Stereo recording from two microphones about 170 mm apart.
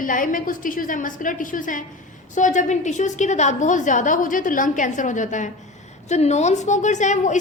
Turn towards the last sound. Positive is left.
turn(degrees=45)  # may be behind; listen again after turning